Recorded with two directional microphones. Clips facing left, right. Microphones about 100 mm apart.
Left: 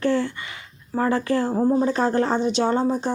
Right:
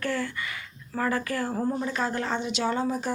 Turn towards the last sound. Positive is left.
turn(degrees=30)  # may be behind; listen again after turning